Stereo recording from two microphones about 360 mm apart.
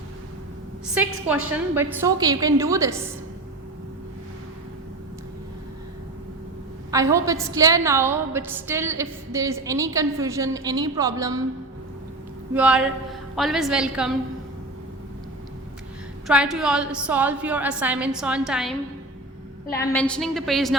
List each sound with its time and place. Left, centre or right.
1.0 s a woman's voice: centre
6.9 s a woman's voice: centre
12.5 s a woman's voice: centre
16.2 s a woman's voice: centre
19.9 s a woman's voice: centre